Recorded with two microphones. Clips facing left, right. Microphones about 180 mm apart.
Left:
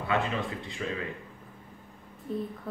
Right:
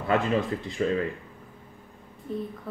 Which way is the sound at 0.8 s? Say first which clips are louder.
Right 9 dB; 40° right (ahead or behind).